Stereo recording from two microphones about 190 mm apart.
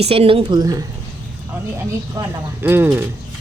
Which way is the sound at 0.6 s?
20° right (ahead or behind).